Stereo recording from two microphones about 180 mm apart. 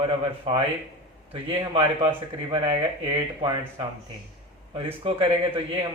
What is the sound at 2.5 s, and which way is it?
Speech, 30° right (ahead or behind).